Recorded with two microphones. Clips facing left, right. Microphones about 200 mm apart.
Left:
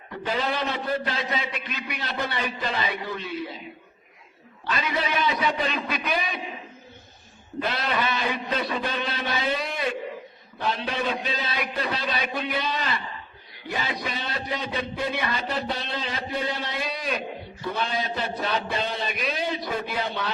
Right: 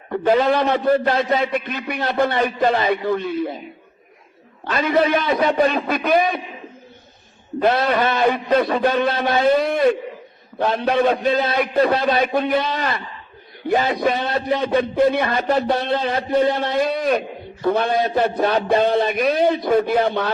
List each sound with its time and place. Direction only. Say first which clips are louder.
0.1 s a man's voice: right 11 dB; 55° right (ahead or behind)
4.6 s a man's voice: right 10 dB; 55° right (ahead or behind)
7.6 s a man's voice: right 10 dB; 50° right (ahead or behind)